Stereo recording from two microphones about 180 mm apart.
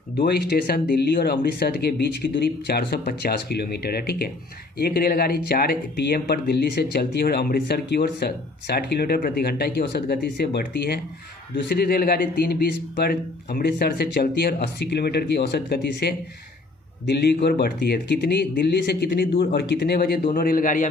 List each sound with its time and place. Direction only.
0.2 s speech: 65° left (ahead or behind)
20.3 s a man's voice: 55° left (ahead or behind)